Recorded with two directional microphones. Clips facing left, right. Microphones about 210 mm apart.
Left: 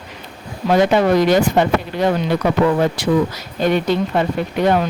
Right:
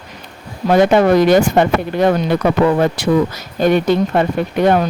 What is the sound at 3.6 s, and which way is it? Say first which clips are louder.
Speech: right 4 dB; 50° right (ahead or behind).